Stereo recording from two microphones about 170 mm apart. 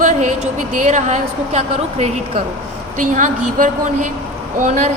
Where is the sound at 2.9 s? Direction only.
50° right (ahead or behind).